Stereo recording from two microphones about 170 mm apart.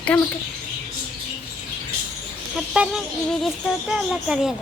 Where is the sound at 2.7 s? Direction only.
5° right (ahead or behind).